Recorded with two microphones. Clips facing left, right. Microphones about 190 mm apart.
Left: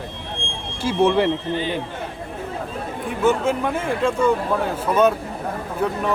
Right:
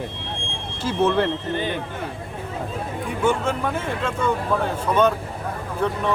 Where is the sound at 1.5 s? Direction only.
50° right (ahead or behind).